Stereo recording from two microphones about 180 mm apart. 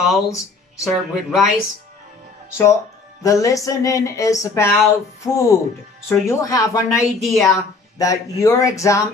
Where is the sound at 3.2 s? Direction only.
20° left (ahead or behind).